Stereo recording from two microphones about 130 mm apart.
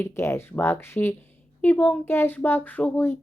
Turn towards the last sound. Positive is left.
turn(degrees=15)  # may be behind; listen again after turning